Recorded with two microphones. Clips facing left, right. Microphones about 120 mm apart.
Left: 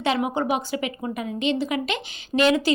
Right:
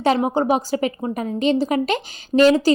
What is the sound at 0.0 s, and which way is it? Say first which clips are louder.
A woman's voice: right 5 dB; 40° right (ahead or behind).